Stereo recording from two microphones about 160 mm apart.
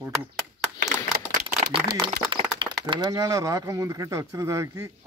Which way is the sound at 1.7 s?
25° right (ahead or behind).